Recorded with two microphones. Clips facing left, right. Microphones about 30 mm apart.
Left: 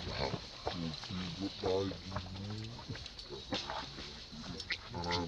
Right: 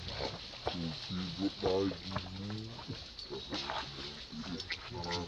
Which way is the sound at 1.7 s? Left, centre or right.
Right.